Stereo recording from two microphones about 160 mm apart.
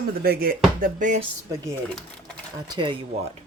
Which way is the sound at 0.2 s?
75° right (ahead or behind).